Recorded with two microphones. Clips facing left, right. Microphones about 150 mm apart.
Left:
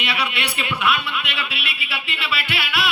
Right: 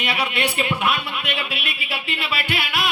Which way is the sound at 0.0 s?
45° right (ahead or behind).